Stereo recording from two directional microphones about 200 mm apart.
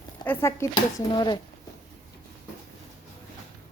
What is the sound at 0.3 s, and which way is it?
Speech, 15° left (ahead or behind).